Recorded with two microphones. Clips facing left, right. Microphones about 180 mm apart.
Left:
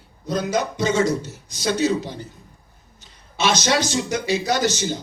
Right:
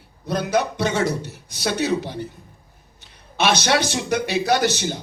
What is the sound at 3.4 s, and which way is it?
A man's voice, 60° right (ahead or behind).